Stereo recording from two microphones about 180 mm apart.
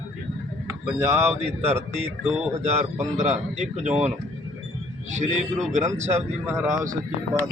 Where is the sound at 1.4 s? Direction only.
35° right (ahead or behind).